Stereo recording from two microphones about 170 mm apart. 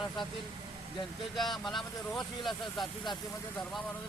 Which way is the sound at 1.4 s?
Centre (ahead or behind).